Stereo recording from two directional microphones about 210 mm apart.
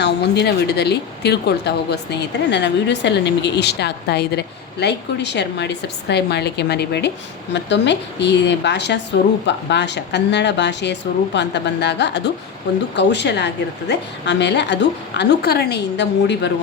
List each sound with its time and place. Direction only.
0.0 s a woman's voice: 50° left (ahead or behind)